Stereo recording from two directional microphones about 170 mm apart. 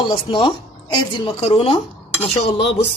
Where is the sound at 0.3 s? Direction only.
30° left (ahead or behind).